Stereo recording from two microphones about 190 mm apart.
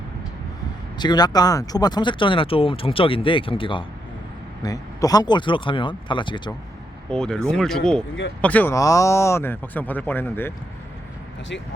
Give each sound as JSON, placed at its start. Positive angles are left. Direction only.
{"t": 0.9, "sound": "speech", "side_deg": 20}
{"t": 7.1, "sound": "speech", "side_deg": 5}